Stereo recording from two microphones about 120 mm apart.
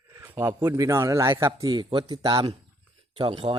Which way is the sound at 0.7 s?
25° right (ahead or behind).